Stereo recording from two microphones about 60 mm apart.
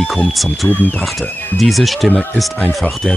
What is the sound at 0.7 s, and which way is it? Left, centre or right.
Speech, left.